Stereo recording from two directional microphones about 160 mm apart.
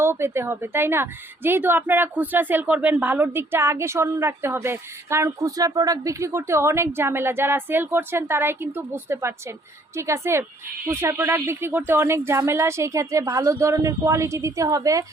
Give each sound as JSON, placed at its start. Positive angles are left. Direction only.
{"t": 0.0, "sound": "a woman's voice", "side_deg": -15}